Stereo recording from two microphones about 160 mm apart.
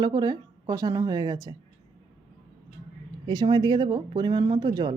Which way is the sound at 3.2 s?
25° right (ahead or behind).